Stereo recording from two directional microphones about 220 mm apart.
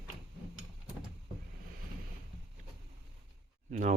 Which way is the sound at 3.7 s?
35° right (ahead or behind).